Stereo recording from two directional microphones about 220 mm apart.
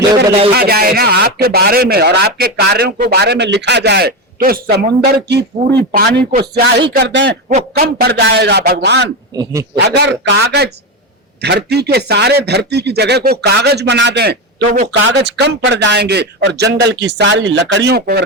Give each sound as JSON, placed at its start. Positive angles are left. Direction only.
{"t": 0.5, "sound": "speech", "side_deg": -45}
{"t": 9.3, "sound": "speech", "side_deg": -15}
{"t": 9.7, "sound": "speech", "side_deg": -50}